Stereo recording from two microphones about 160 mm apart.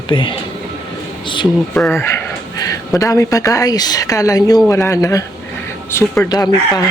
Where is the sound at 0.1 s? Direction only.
30° left (ahead or behind).